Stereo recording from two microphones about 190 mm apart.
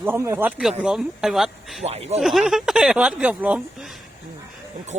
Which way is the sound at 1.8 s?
35° right (ahead or behind).